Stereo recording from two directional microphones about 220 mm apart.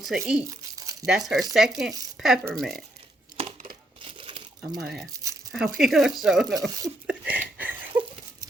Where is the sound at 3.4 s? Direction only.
25° right (ahead or behind).